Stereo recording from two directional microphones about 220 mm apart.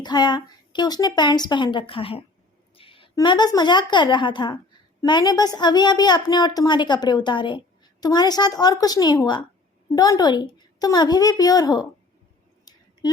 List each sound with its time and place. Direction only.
0.0 s a woman's voice: 20° left (ahead or behind)